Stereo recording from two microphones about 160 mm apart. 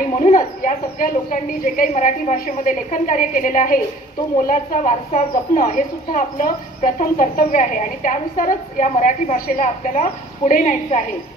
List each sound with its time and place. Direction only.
0.2 s a woman's voice: 55° left (ahead or behind)